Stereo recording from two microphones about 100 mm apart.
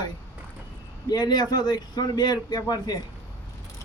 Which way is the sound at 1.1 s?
45° left (ahead or behind).